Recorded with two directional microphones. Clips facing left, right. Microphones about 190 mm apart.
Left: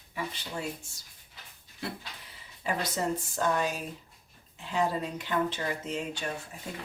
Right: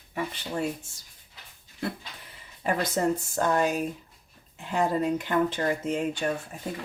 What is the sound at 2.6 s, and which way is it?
Speech, 50° right (ahead or behind).